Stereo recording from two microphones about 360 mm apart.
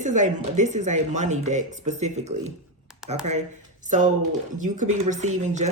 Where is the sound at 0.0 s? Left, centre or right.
Centre.